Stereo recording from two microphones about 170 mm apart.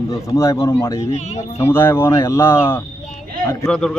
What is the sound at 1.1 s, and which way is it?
Speech, 40° left (ahead or behind).